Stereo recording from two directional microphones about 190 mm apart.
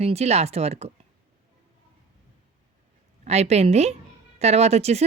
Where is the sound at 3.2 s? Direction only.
35° right (ahead or behind).